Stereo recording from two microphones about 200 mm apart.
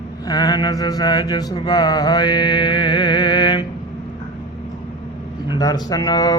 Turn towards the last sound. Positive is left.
turn(degrees=20)  # may be behind; listen again after turning